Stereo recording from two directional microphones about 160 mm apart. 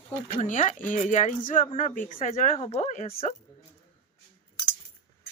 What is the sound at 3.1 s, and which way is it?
Speech, 35° left (ahead or behind).